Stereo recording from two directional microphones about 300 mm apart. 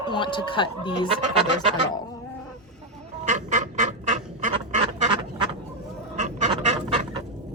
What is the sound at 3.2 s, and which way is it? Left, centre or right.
Duck, right.